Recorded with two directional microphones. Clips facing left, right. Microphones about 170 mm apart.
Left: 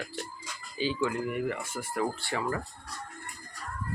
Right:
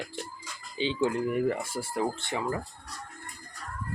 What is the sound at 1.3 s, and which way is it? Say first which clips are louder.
Speech: right 4 dB; 35° right (ahead or behind).